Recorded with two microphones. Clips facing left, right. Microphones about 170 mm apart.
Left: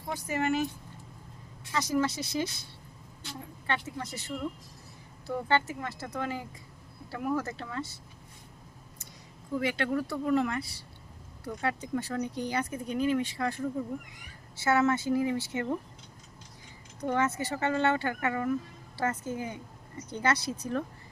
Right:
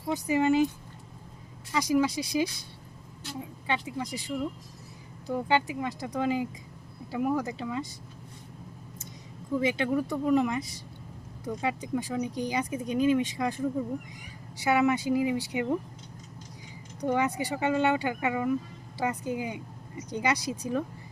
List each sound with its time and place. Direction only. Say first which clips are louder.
0.1 s speech: right 5 dB; 15° right (ahead or behind)
1.7 s speech: right 3 dB; 10° right (ahead or behind)
3.7 s speech: right 2 dB; 15° right (ahead or behind)
9.6 s speech: right 3 dB; 20° right (ahead or behind)
17.0 s speech: right 2 dB; 15° right (ahead or behind)